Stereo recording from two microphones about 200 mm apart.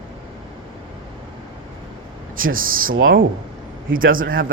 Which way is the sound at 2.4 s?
45° right (ahead or behind).